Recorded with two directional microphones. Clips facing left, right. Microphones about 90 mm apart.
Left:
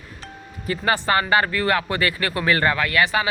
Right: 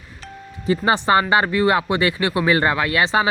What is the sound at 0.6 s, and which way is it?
Speech, 20° right (ahead or behind).